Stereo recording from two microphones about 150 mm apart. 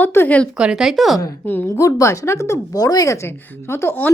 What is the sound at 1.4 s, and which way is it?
Speech, 15° left (ahead or behind).